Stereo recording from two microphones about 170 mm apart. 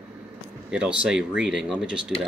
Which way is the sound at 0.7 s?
5° right (ahead or behind).